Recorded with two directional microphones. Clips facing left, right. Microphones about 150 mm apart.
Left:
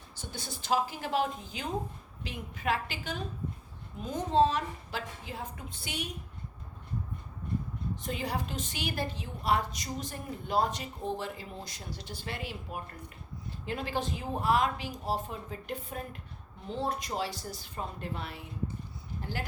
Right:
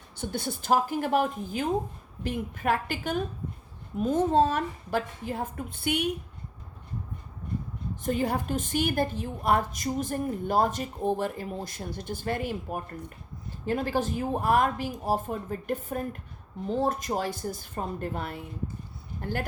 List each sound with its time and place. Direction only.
0.2 s a woman's voice: 55° right (ahead or behind)
8.0 s a woman's voice: 50° right (ahead or behind)